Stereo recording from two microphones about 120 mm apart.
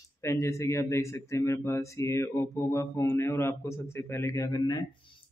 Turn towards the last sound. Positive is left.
turn(degrees=30)  # may be behind; listen again after turning